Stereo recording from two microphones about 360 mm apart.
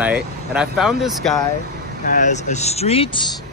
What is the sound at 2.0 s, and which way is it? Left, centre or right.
Speech, left.